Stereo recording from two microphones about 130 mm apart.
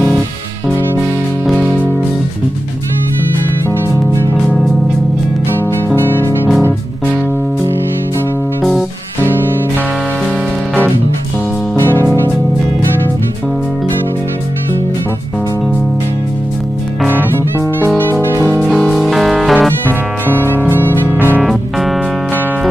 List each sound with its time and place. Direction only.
5.9 s music: 15° left (ahead or behind)
11.7 s music: 15° left (ahead or behind)
18.2 s music: 20° left (ahead or behind)
18.6 s music: centre (ahead or behind)
19.9 s music: 15° left (ahead or behind)
21.4 s music: centre (ahead or behind)